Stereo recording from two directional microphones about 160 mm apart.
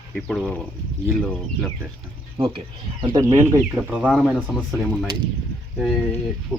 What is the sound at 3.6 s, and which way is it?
Speech, 5° right (ahead or behind).